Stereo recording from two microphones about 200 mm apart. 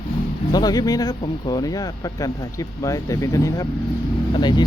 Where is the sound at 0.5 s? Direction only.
20° left (ahead or behind).